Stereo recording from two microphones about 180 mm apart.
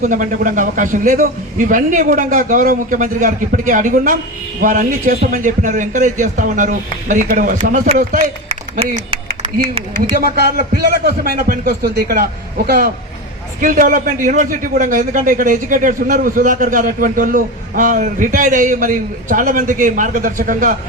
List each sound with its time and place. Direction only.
0.0 s a man's voice: 45° right (ahead or behind)
8.8 s speech: 30° right (ahead or behind)
10.2 s a man's voice: 60° right (ahead or behind)